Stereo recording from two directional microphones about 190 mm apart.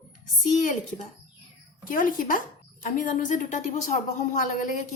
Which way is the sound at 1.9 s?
45° left (ahead or behind).